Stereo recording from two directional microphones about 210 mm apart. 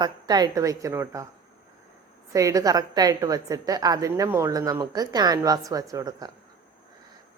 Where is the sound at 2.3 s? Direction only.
15° right (ahead or behind).